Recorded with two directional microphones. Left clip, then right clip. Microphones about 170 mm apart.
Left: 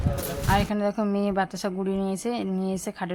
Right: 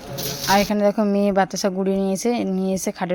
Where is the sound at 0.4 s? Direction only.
35° right (ahead or behind).